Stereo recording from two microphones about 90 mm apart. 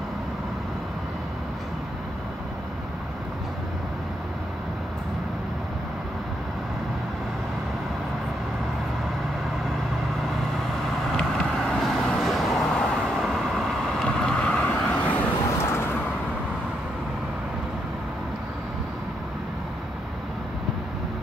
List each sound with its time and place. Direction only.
10.9 s vehicle: 5° left (ahead or behind)
15.6 s vehicle: 30° left (ahead or behind)